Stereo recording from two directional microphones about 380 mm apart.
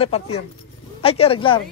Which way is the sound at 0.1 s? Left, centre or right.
Centre.